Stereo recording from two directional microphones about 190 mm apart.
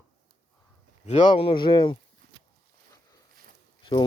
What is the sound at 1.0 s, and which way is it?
Speech, 30° left (ahead or behind).